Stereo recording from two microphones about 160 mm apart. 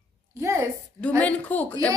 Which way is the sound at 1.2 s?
10° left (ahead or behind).